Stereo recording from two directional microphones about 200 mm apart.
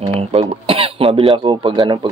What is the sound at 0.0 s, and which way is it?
Cough, 30° right (ahead or behind).